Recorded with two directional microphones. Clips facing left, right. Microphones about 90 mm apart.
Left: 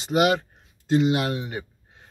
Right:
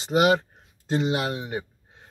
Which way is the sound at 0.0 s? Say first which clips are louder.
Right 1 dB; 30° right (ahead or behind).